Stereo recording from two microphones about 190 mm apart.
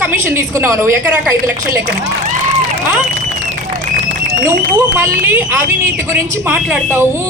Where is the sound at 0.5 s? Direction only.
15° right (ahead or behind).